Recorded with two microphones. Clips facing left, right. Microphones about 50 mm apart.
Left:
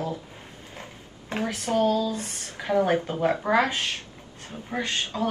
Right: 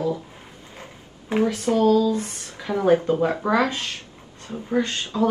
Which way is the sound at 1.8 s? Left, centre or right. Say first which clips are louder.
Right 5 dB; right.